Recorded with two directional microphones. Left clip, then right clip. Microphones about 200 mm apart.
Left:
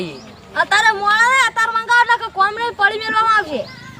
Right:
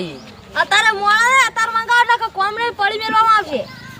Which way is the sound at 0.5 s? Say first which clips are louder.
Even; 25° right (ahead or behind).